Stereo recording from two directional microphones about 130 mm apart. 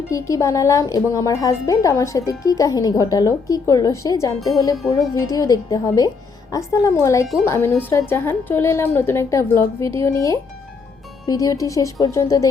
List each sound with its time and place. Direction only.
0.1 s speech: 25° left (ahead or behind)